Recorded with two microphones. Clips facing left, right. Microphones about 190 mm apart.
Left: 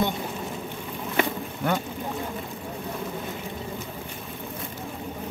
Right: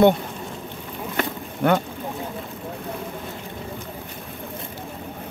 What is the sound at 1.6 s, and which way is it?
Speech, 60° right (ahead or behind).